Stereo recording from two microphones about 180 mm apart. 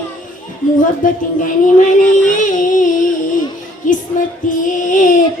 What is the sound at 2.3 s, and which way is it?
Music, 45° left (ahead or behind).